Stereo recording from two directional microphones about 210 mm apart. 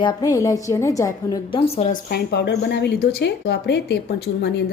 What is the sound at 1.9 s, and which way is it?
Speech, 45° left (ahead or behind).